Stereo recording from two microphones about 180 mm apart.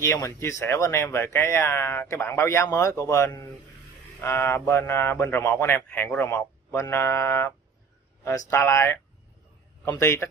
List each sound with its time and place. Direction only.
0.0 s speech: 15° left (ahead or behind)